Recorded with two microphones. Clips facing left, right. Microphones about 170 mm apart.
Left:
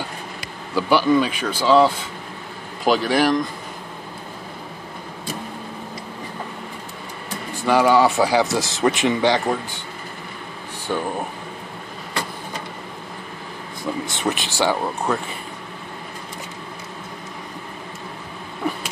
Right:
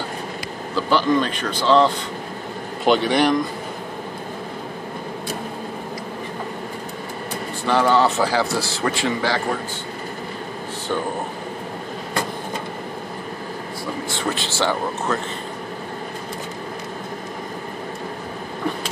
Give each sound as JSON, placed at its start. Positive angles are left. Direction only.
{"t": 0.7, "sound": "speech", "side_deg": 10}
{"t": 7.6, "sound": "speech", "side_deg": 10}
{"t": 14.0, "sound": "speech", "side_deg": 20}